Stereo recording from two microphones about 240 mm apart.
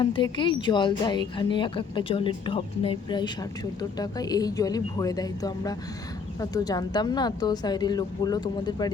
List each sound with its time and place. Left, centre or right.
0.0 s speech: centre